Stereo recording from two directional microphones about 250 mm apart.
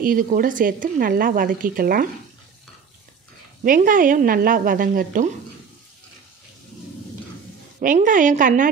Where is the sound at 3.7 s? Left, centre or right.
Right.